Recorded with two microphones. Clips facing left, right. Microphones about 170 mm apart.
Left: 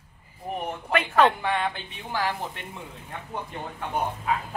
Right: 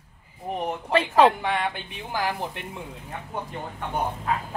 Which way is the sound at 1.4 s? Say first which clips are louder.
Even; 10° right (ahead or behind).